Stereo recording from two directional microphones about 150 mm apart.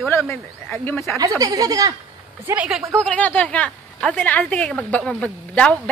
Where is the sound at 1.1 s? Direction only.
25° right (ahead or behind).